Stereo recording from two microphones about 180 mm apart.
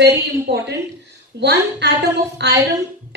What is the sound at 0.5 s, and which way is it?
A woman's voice, 65° right (ahead or behind).